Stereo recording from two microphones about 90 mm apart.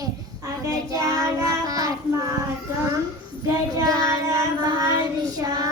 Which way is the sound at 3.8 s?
45° right (ahead or behind).